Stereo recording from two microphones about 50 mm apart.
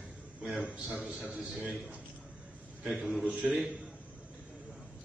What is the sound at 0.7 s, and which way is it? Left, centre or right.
Speech, right.